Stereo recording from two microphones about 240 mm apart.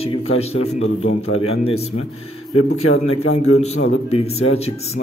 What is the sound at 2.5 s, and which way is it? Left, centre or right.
Speech, left.